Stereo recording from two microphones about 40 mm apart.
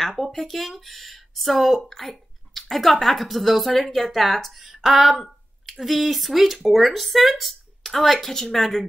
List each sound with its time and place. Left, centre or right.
0.2 s speech: centre